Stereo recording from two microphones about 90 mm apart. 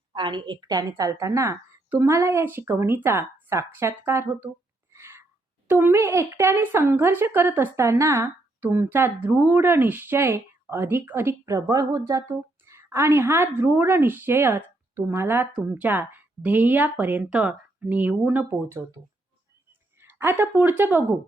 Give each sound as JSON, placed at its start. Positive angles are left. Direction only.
{"t": 0.1, "sound": "a woman's voice", "side_deg": -55}
{"t": 4.9, "sound": "a sound", "side_deg": -30}
{"t": 5.6, "sound": "speech", "side_deg": -25}
{"t": 12.7, "sound": "speech", "side_deg": -30}
{"t": 20.0, "sound": "a sound", "side_deg": -25}
{"t": 20.6, "sound": "speech", "side_deg": -20}